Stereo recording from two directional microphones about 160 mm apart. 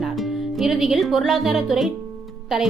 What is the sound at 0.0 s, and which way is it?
Speech, centre (ahead or behind).